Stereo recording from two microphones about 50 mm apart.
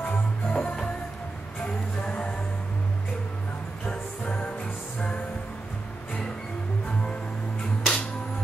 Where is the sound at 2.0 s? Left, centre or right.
Left.